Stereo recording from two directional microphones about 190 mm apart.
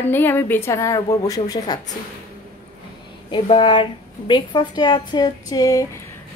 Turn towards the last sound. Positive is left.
turn(degrees=20)  # may be behind; listen again after turning